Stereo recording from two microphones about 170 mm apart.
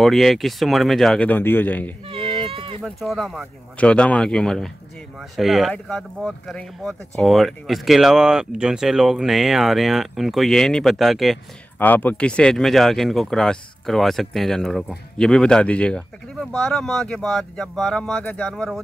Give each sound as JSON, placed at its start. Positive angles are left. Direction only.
{"t": 0.0, "sound": "speech", "side_deg": 0}
{"t": 2.0, "sound": "a sound", "side_deg": -35}
{"t": 2.8, "sound": "speech", "side_deg": 0}
{"t": 11.8, "sound": "speech", "side_deg": 10}